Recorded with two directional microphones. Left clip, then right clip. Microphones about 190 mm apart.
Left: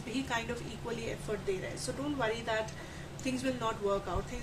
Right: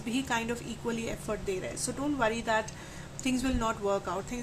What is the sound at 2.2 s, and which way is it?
A woman's voice, 60° right (ahead or behind).